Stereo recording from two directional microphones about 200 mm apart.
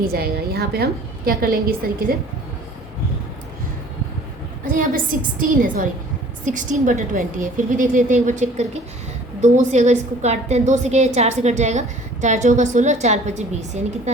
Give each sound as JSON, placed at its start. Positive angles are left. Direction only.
{"t": 0.1, "sound": "a woman's voice", "side_deg": -50}
{"t": 4.6, "sound": "a woman's voice", "side_deg": -40}